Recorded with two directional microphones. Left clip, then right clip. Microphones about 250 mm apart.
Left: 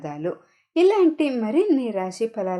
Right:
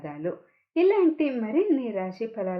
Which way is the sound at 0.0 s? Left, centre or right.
Left.